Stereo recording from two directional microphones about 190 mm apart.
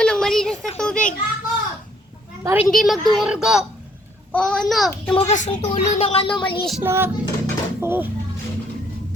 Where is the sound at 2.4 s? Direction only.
10° right (ahead or behind).